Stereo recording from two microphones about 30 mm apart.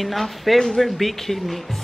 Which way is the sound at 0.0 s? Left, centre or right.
Centre.